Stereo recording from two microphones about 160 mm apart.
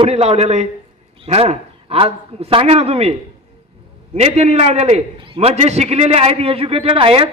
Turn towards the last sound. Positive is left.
turn(degrees=-35)  # may be behind; listen again after turning